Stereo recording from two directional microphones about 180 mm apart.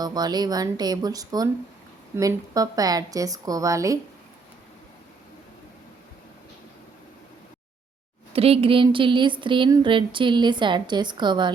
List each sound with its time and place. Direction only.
0.0 s speech: 20° right (ahead or behind)
8.3 s speech: 35° right (ahead or behind)